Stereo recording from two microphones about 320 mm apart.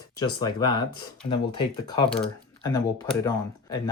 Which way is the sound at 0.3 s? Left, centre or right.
Centre.